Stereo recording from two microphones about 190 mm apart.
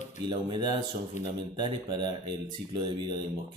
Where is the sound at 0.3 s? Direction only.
25° right (ahead or behind).